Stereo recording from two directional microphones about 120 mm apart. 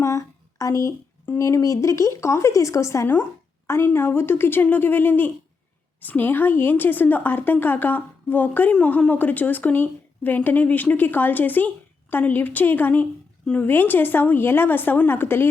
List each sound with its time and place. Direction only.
0.0 s a woman's voice: 25° left (ahead or behind)